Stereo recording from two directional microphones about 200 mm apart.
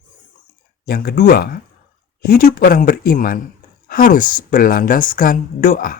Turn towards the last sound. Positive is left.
turn(degrees=45)  # may be behind; listen again after turning